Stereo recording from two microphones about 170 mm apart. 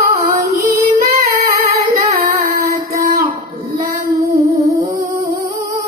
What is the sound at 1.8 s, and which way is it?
Singing, 60° right (ahead or behind).